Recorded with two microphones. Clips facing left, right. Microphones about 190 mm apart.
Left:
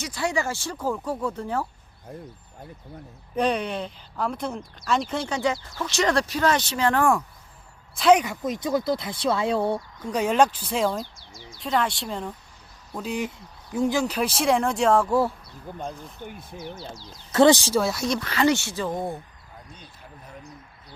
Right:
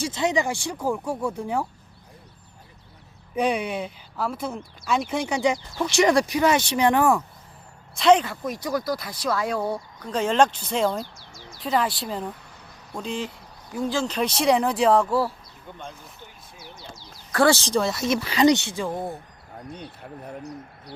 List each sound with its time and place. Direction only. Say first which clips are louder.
0.0 s speech: right 3 dB; 20° right (ahead or behind)
3.3 s speech: even; 10° right (ahead or behind)
7.9 s speech: even; 5° left (ahead or behind)
8.2 s speech: left 2 dB; 20° left (ahead or behind)
10.1 s speech: even; 10° left (ahead or behind)
13.0 s speech: left 1 dB; 15° left (ahead or behind)
14.3 s speech: right 2 dB; centre (ahead or behind)
16.2 s speech: left 12 dB; 50° left (ahead or behind)
17.1 s speech: left 3 dB; 20° left (ahead or behind)
17.7 s speech: even; centre (ahead or behind)
18.2 s speech: right 5 dB; 15° right (ahead or behind)
19.7 s speech: right 8 dB; 60° right (ahead or behind)